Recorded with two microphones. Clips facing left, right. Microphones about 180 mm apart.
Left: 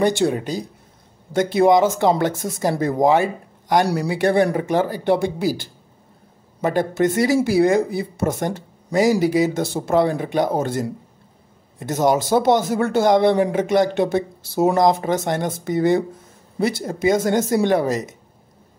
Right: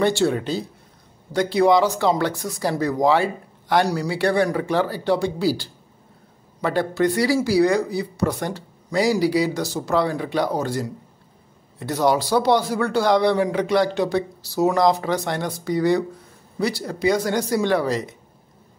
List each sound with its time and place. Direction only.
0.0 s speech: 15° left (ahead or behind)
6.6 s speech: 20° left (ahead or behind)